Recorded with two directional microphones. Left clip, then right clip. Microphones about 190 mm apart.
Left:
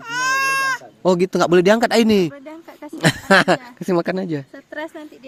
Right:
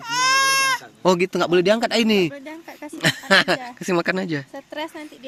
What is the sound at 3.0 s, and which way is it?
Speech, 35° left (ahead or behind).